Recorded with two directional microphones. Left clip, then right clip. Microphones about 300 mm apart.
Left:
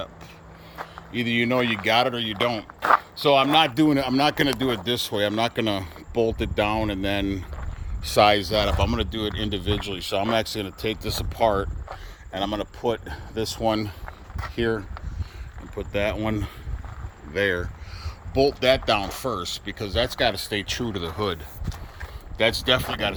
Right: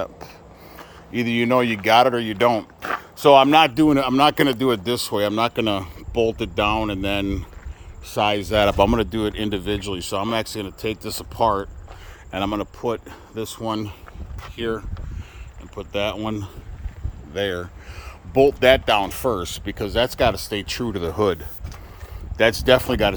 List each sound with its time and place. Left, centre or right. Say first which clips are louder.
1.2 s speech: right 3 dB; centre
15.7 s speech: right 1 dB; centre
18.0 s speech: right 5 dB; centre
21.1 s speech: right 9 dB; centre
22.4 s speech: right 5 dB; centre